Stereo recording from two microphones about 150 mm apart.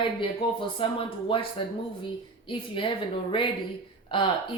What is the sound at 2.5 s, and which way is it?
Speech, 35° left (ahead or behind).